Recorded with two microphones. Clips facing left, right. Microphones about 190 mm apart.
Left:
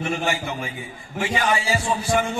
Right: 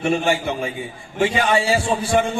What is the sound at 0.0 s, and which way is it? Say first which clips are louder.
A man's voice: right 5 dB; 30° right (ahead or behind).